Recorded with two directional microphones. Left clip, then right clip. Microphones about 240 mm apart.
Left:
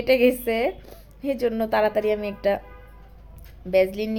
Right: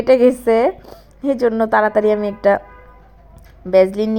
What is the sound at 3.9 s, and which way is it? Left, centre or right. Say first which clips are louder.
Speech: right 9 dB; centre.